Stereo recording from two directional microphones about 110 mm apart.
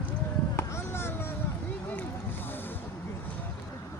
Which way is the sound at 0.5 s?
20° left (ahead or behind).